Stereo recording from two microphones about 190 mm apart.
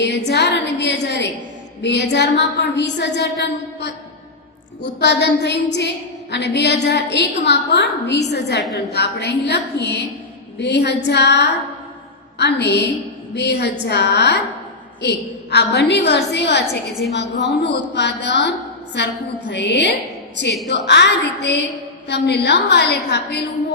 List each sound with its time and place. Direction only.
0.0 s a woman's voice: 65° left (ahead or behind)